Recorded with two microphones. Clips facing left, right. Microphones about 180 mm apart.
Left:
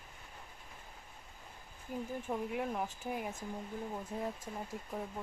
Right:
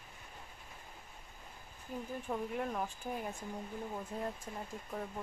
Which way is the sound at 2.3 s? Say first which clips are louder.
Even; 10° left (ahead or behind).